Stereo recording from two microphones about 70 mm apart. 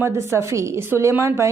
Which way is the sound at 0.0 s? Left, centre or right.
Right.